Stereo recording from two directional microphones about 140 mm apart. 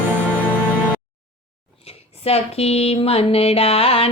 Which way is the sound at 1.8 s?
45° left (ahead or behind).